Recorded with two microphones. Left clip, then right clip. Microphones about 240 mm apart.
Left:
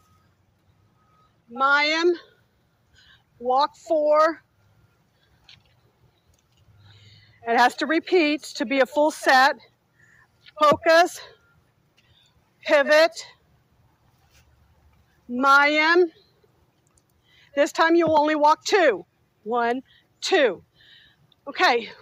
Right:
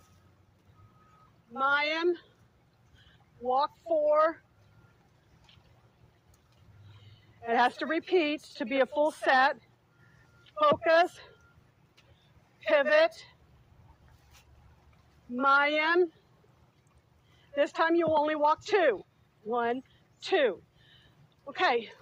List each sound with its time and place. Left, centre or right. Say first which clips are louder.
1.5 s speech: left 8 dB; left
3.5 s speech: left 7 dB; left
7.0 s speech: left 7 dB; left
12.6 s speech: left 6 dB; left
15.4 s speech: left 8 dB; left
17.5 s speech: left 7 dB; left
19.5 s a sound: left 7 dB; left